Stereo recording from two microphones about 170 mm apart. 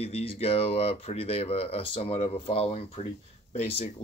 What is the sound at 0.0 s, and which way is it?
Speech, 35° left (ahead or behind).